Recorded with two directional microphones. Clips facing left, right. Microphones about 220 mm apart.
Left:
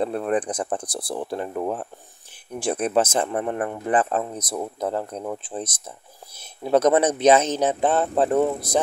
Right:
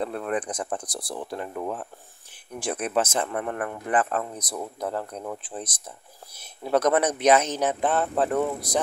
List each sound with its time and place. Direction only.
0.0 s a man's voice: 30° left (ahead or behind)